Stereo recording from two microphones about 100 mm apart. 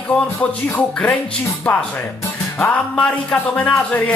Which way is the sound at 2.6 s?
15° left (ahead or behind).